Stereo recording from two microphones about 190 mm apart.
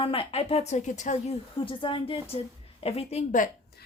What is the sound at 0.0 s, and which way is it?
A woman's voice, 30° left (ahead or behind).